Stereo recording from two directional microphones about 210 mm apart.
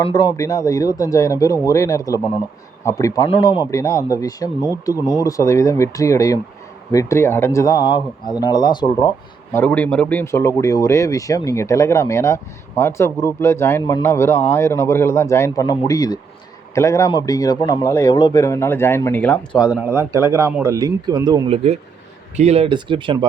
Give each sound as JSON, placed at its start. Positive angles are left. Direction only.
{"t": 0.0, "sound": "speech", "side_deg": 20}
{"t": 3.2, "sound": "speech", "side_deg": 25}
{"t": 19.6, "sound": "speech", "side_deg": -10}
{"t": 21.5, "sound": "speech", "side_deg": -30}